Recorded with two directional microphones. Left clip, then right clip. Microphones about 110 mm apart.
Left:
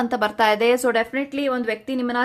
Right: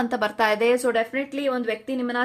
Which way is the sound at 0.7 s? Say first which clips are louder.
Left 2 dB; 30° left (ahead or behind).